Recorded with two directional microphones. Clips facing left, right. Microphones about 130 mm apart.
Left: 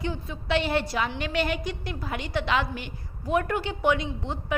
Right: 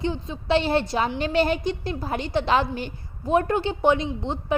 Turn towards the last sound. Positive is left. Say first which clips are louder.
# right 5 dB
turn(degrees=-25)  # may be behind; listen again after turning